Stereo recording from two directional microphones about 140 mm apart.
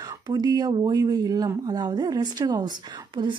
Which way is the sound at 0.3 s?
30° right (ahead or behind).